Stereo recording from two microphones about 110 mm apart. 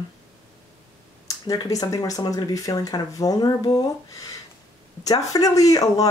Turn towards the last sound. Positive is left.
turn(degrees=30)  # may be behind; listen again after turning